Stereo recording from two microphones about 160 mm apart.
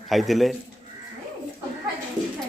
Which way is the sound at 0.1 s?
Centre (ahead or behind).